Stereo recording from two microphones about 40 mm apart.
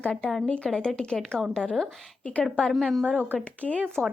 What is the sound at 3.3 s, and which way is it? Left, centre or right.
Speech, left.